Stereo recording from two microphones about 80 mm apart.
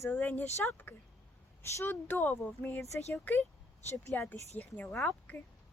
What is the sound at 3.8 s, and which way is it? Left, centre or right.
Speech, left.